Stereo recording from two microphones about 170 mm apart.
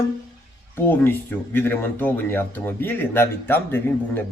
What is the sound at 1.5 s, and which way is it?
Speech, 10° left (ahead or behind).